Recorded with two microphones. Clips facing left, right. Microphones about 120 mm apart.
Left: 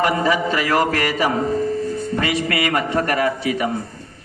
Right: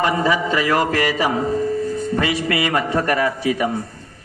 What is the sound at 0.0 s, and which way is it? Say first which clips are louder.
A man's voice: even; 25° right (ahead or behind).